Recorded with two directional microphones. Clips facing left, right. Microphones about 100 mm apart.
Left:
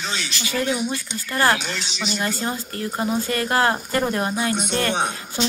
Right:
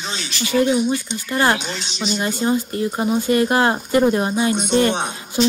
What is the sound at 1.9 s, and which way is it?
Speech, 5° left (ahead or behind).